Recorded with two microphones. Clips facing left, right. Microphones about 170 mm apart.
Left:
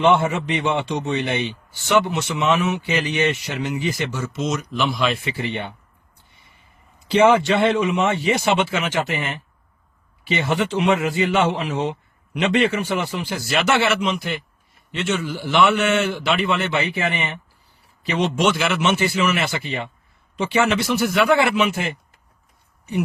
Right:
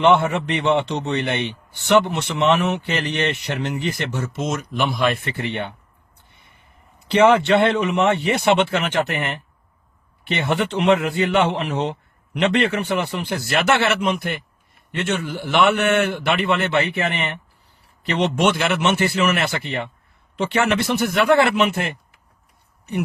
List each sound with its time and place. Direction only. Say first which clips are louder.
0.0 s a man's voice: right 1 dB; 60° right (ahead or behind)
6.3 s gasp: right 1 dB; 65° right (ahead or behind)
7.1 s a man's voice: right 1 dB; 65° right (ahead or behind)